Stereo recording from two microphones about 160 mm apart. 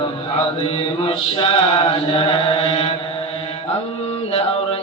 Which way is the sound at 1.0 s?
40° left (ahead or behind).